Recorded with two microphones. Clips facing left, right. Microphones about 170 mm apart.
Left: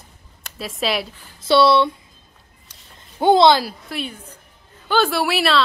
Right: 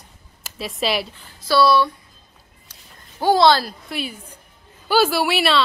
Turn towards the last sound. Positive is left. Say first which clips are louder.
# even
turn(degrees=0)  # may be behind; listen again after turning